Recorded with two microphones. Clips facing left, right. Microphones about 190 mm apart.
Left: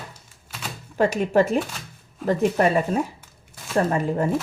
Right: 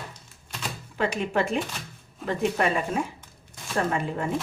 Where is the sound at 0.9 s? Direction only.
45° left (ahead or behind).